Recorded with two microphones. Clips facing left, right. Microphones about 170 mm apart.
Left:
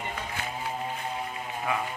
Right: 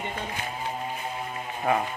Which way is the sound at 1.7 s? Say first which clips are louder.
Right 6 dB; 40° right (ahead or behind).